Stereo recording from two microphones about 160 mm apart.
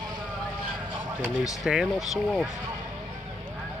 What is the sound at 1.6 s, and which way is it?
Speech, centre (ahead or behind).